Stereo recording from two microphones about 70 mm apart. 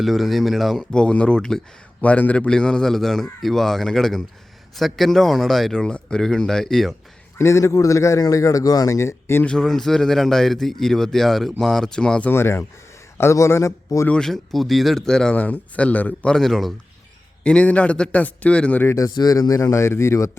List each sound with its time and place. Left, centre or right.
0.0 s speech: centre
2.0 s a man's voice: left; by 6.9 s centre
7.3 s speech: left
9.5 s speech: centre
12.3 s speech: left
14.1 s a man's voice: centre
16.3 s speech: centre
17.4 s a man's voice: centre
19.1 s speech: left